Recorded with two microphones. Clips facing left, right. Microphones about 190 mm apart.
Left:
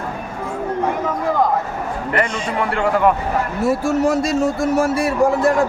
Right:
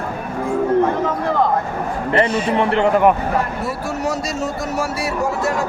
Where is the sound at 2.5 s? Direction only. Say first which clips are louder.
Right 2 dB; 25° right (ahead or behind).